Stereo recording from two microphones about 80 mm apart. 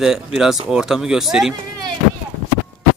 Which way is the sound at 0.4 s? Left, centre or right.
Centre.